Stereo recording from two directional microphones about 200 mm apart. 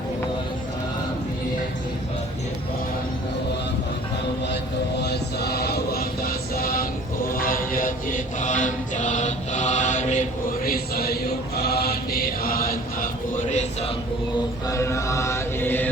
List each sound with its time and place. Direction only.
4.9 s music: 55° left (ahead or behind); by 10.2 s 35° left (ahead or behind)
10.7 s chant: 50° left (ahead or behind)
14.7 s mantra: 15° left (ahead or behind)